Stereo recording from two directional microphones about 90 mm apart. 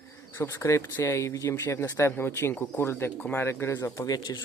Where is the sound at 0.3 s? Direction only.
30° left (ahead or behind).